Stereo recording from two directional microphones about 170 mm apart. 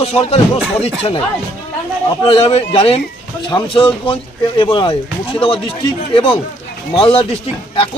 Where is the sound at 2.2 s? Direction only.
30° left (ahead or behind).